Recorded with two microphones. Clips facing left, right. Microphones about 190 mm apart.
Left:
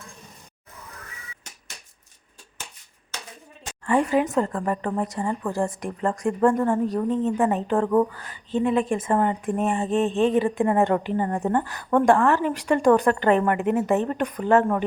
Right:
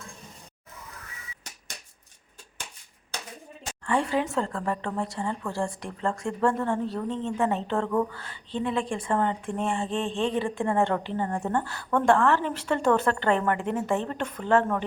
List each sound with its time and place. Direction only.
4.1 s a woman's voice: 15° left (ahead or behind)